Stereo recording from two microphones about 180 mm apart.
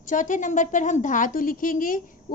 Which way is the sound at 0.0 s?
45° left (ahead or behind).